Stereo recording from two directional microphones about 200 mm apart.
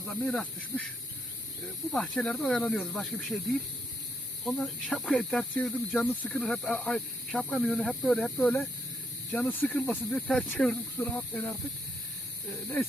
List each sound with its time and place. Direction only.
0.0 s speech: 5° left (ahead or behind)
1.9 s speech: 5° left (ahead or behind)